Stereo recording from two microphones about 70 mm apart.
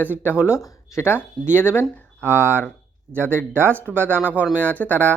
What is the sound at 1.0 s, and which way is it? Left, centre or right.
Speech, left.